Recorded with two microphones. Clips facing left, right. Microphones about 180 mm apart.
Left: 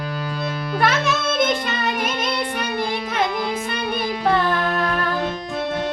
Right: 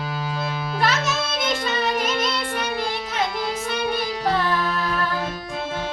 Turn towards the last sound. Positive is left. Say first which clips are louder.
# left 3 dB
turn(degrees=55)  # may be behind; listen again after turning